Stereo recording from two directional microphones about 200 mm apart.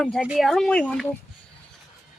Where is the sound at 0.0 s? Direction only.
5° left (ahead or behind).